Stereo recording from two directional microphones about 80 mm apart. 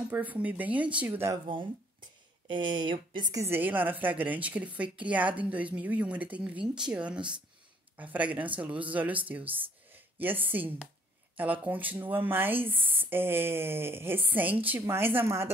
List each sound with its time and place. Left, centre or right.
0.1 s a woman's voice: right
2.4 s speech: right
3.4 s a woman's voice: right